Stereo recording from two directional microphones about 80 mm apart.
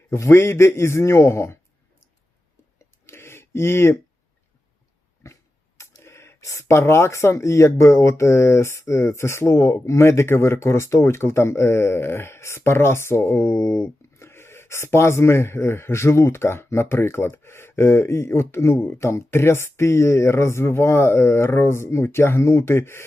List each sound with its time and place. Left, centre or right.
0.2 s speech: left
2.7 s a sound: left
5.2 s speech: left